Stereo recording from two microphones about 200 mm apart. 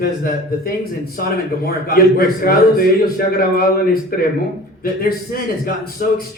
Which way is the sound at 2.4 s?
50° left (ahead or behind).